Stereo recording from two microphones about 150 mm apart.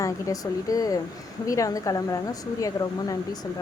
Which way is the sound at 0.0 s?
25° left (ahead or behind).